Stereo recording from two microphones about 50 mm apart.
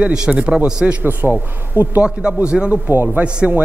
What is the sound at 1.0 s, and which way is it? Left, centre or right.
Speech, right.